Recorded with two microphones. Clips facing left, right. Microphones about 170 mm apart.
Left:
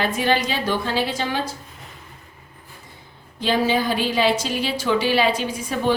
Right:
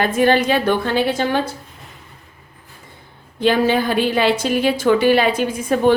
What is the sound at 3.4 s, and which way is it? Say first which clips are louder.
A woman's voice: right 4 dB; 60° right (ahead or behind).